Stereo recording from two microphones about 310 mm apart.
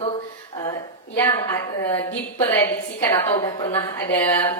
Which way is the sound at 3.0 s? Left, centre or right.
Centre.